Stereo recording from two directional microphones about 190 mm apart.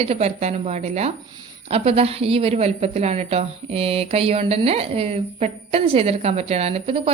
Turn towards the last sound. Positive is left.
turn(degrees=-30)  # may be behind; listen again after turning